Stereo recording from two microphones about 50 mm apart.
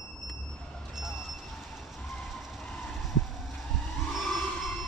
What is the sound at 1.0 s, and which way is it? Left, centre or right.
Vehicle, centre.